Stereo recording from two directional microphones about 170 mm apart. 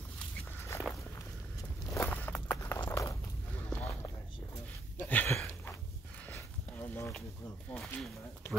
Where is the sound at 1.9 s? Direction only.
10° left (ahead or behind).